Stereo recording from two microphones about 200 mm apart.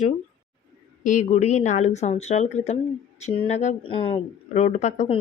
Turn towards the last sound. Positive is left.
turn(degrees=35)  # may be behind; listen again after turning